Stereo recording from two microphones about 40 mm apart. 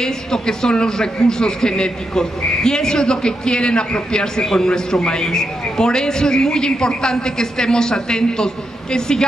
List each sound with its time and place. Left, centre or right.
0.0 s a man's voice: centre